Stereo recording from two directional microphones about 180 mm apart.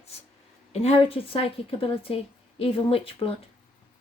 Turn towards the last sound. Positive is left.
turn(degrees=30)  # may be behind; listen again after turning